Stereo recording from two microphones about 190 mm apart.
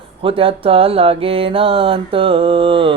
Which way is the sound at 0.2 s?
30° right (ahead or behind).